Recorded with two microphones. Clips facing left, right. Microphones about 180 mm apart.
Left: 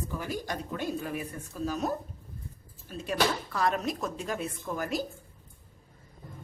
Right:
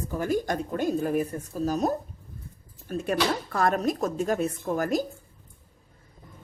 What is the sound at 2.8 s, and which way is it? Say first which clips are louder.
Speech: right 3 dB; 55° right (ahead or behind).